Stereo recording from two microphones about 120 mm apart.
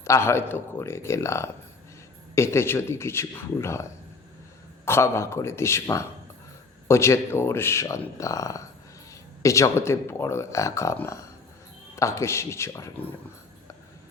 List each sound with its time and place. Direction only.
0.0 s speech: 20° left (ahead or behind)
4.9 s speech: 20° left (ahead or behind)